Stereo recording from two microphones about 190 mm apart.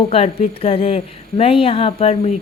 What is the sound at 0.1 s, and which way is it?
A woman's voice, 30° left (ahead or behind).